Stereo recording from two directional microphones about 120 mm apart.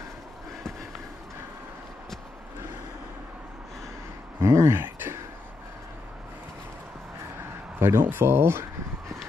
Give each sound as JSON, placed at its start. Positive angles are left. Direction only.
{"t": 4.4, "sound": "speech", "side_deg": -25}
{"t": 7.8, "sound": "speech", "side_deg": -20}